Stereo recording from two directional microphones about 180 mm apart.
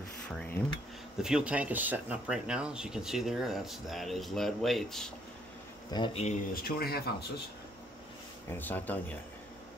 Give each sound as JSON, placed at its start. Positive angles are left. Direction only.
{"t": 1.1, "sound": "speech", "side_deg": -5}
{"t": 5.9, "sound": "speech", "side_deg": 25}
{"t": 6.5, "sound": "speech", "side_deg": 55}
{"t": 8.5, "sound": "speech", "side_deg": 10}